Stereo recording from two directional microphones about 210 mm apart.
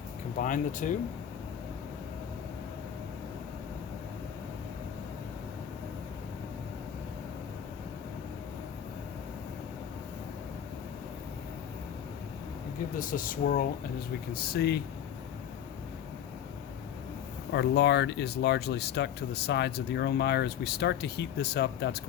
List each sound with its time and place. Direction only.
0.3 s speech: 35° left (ahead or behind)
13.0 s speech: 40° left (ahead or behind)
17.5 s speech: 55° left (ahead or behind)